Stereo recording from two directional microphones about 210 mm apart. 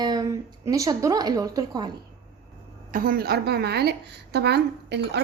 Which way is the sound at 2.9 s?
40° right (ahead or behind).